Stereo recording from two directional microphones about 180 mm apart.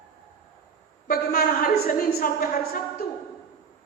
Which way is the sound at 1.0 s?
55° left (ahead or behind).